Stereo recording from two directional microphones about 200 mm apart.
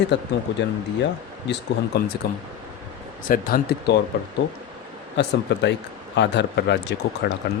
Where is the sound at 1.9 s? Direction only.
55° left (ahead or behind).